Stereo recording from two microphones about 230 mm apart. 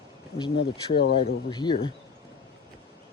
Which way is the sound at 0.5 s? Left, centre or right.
Left.